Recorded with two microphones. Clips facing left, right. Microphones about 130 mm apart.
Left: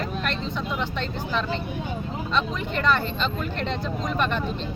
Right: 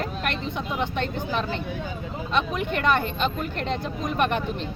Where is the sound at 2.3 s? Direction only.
60° right (ahead or behind).